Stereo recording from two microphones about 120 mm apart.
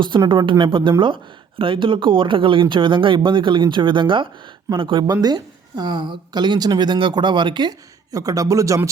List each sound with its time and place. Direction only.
0.3 s a woman's voice: 40° right (ahead or behind); by 8.9 s 25° right (ahead or behind)